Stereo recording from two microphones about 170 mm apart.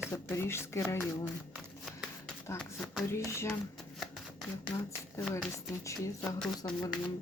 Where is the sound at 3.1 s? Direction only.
15° left (ahead or behind).